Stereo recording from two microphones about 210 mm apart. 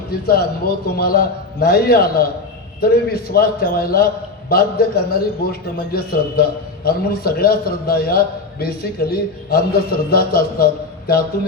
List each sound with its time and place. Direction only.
0.1 s a man's voice: 45° left (ahead or behind)